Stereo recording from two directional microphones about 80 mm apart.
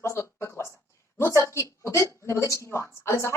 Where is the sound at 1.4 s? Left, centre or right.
Left.